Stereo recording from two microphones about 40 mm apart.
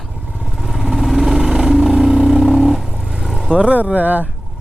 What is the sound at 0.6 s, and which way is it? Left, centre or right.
Vehicle, centre.